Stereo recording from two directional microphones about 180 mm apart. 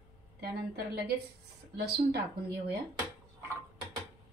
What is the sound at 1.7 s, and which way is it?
Speech, 60° right (ahead or behind).